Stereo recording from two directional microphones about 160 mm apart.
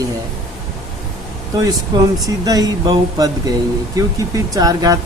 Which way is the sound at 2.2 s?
20° right (ahead or behind).